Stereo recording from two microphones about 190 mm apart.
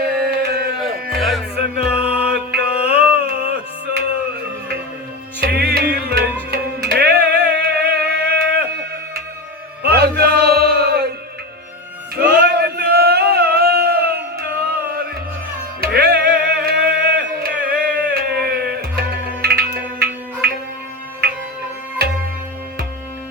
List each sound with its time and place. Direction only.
0.1 s a sound: 55° right (ahead or behind)
0.8 s music: centre (ahead or behind)
1.5 s music: 60° right (ahead or behind)
5.4 s music: 60° right (ahead or behind)
9.8 s music: 55° right (ahead or behind)
12.2 s a sound: 60° right (ahead or behind)
15.8 s music: 55° right (ahead or behind)